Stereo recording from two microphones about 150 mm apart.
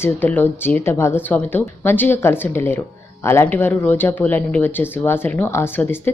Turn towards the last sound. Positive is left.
turn(degrees=15)  # may be behind; listen again after turning